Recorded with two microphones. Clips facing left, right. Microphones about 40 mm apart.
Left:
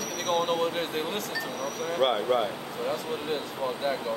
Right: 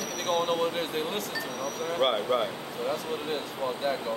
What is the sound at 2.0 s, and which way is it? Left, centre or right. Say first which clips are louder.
Speech: left 1 dB; centre.